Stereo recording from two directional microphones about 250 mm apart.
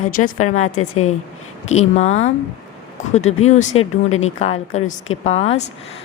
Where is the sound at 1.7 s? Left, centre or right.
Left.